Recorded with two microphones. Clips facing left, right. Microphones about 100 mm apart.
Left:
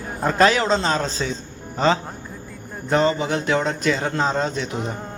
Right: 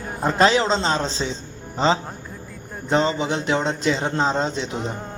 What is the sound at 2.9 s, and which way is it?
A man's voice, 25° right (ahead or behind).